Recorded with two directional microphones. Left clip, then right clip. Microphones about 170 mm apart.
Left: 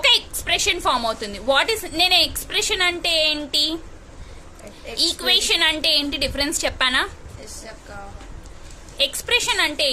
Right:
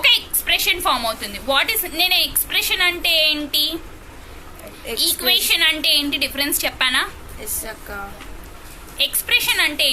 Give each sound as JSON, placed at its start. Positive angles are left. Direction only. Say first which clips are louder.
{"t": 0.0, "sound": "a woman's voice", "louder": "right 1 dB", "side_deg": 60}
{"t": 4.9, "sound": "a woman's voice", "louder": "right 1 dB", "side_deg": 60}
{"t": 9.0, "sound": "a woman's voice", "louder": "right 2 dB", "side_deg": 60}